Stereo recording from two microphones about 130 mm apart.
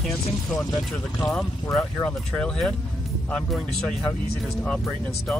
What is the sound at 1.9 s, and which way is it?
Speech, 5° left (ahead or behind).